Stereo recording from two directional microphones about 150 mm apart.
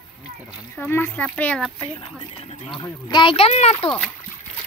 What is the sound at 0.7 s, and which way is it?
A child's voice, 15° left (ahead or behind).